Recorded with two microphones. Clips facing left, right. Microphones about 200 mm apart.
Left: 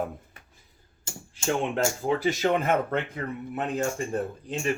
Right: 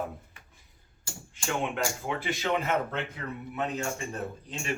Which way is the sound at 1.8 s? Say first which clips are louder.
Left 7 dB; 35° left (ahead or behind).